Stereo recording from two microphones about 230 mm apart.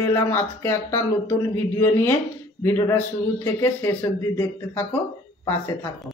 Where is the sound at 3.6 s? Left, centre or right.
Centre.